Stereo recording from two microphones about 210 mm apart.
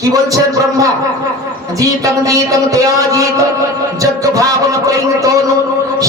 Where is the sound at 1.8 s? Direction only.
15° right (ahead or behind).